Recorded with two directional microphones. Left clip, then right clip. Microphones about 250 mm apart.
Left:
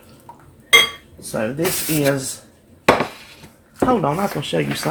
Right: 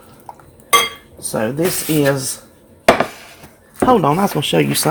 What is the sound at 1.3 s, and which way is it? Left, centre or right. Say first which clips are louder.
Speech: right 3 dB; right.